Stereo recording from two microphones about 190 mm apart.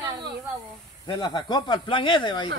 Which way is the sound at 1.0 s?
20° left (ahead or behind).